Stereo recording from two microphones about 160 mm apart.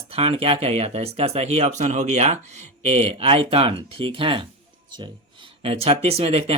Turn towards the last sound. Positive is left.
turn(degrees=-40)  # may be behind; listen again after turning